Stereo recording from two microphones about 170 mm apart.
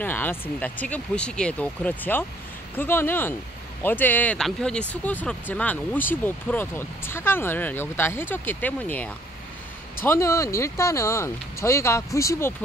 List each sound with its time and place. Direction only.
0.0 s speech: 10° left (ahead or behind)